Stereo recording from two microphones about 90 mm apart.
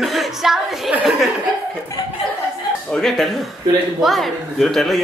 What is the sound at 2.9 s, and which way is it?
A woman's voice, 5° left (ahead or behind).